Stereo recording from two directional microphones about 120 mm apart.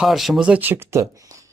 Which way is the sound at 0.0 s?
Centre (ahead or behind).